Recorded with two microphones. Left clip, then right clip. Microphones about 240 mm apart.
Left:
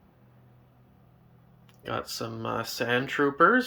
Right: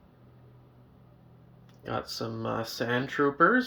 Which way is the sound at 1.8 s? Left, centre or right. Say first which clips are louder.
Left 1 dB; centre.